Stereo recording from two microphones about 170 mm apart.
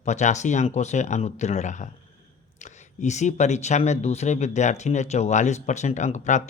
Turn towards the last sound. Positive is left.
turn(degrees=45)  # may be behind; listen again after turning